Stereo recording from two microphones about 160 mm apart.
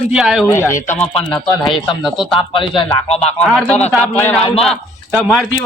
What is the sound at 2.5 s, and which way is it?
Speech, 30° left (ahead or behind).